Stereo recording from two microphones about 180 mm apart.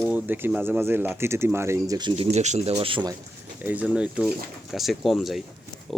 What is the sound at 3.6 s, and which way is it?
Speech, 10° right (ahead or behind).